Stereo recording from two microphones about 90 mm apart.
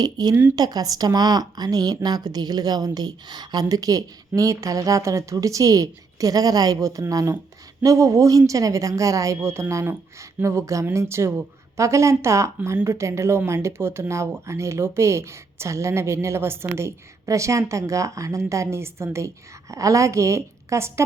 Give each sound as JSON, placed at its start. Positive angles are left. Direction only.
{"t": 0.0, "sound": "speech", "side_deg": -45}